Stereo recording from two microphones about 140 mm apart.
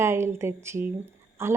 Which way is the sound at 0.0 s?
20° right (ahead or behind).